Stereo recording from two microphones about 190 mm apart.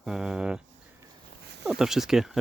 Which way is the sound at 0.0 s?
5° right (ahead or behind).